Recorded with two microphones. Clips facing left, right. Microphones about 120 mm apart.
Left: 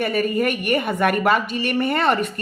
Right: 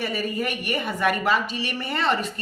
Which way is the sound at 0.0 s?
55° left (ahead or behind).